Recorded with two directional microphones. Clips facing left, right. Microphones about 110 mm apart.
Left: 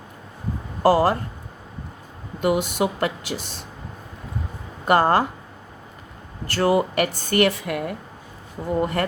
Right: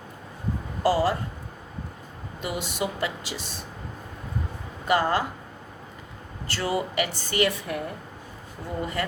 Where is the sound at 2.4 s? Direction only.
55° left (ahead or behind).